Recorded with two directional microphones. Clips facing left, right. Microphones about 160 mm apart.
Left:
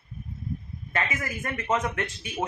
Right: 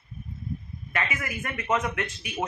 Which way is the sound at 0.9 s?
35° left (ahead or behind).